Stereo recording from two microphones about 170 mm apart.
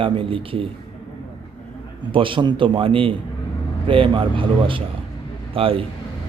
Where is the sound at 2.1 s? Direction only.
30° right (ahead or behind).